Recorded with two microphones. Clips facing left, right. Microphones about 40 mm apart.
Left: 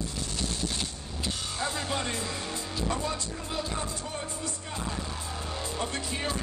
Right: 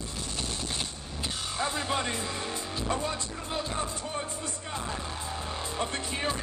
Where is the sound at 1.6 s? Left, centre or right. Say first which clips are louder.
Right 2 dB; right.